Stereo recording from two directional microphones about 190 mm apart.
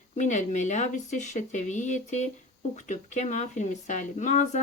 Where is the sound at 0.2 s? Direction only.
40° left (ahead or behind).